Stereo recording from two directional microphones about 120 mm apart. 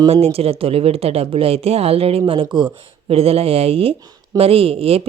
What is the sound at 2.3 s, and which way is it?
A woman's voice, 45° right (ahead or behind).